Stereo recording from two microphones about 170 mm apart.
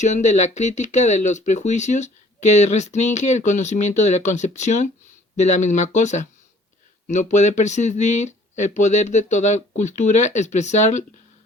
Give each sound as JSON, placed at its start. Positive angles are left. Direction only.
{"t": 0.0, "sound": "speech", "side_deg": 45}